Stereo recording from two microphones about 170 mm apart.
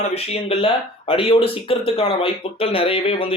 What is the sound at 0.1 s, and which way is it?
Speech, 35° left (ahead or behind).